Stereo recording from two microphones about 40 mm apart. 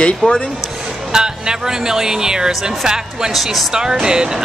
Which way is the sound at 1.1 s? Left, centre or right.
Centre.